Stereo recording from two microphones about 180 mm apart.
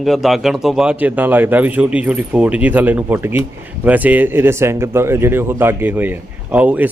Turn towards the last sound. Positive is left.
turn(degrees=-10)  # may be behind; listen again after turning